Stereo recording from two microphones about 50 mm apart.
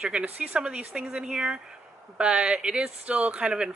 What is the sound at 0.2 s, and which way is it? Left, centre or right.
A woman's voice, right.